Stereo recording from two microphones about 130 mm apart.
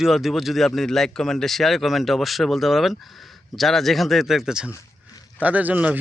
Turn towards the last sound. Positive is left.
turn(degrees=-10)  # may be behind; listen again after turning